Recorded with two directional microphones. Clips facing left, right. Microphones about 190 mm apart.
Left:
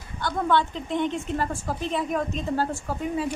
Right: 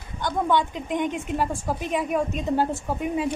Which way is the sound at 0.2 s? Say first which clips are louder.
Right 1 dB; 15° right (ahead or behind).